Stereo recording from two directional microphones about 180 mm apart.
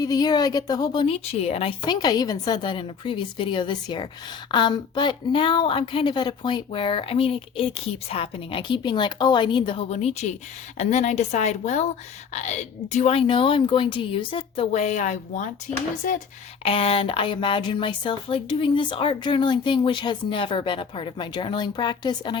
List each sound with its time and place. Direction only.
0.0 s a woman's voice: 20° left (ahead or behind); by 15.4 s 40° left (ahead or behind)
16.6 s a woman's voice: 30° left (ahead or behind)